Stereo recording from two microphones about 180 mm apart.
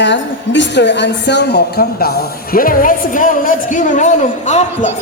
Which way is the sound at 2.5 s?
50° left (ahead or behind).